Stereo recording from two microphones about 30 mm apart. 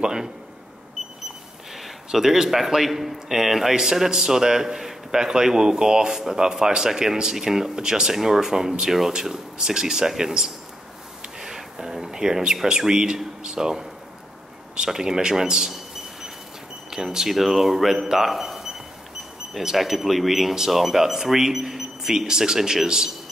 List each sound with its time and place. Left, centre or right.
0.0 s speech: right
1.0 s a sound: centre
2.1 s speech: centre
11.3 s a sound: centre
12.6 s speech: right
14.9 s speech: centre
16.9 s speech: centre
17.3 s a man's voice: centre
19.8 s speech: centre